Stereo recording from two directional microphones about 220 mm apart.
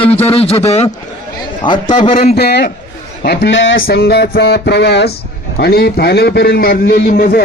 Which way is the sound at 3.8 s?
45° left (ahead or behind).